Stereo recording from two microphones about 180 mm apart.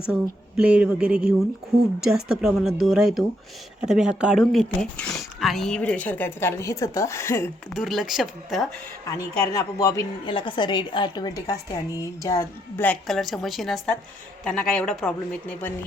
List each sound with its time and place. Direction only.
0.0 s a woman's voice: 5° right (ahead or behind); by 7.5 s 15° left (ahead or behind)
7.7 s a woman's voice: centre (ahead or behind)
9.5 s speech: 15° left (ahead or behind)
10.2 s a woman's voice: 30° left (ahead or behind); by 15.7 s 5° left (ahead or behind)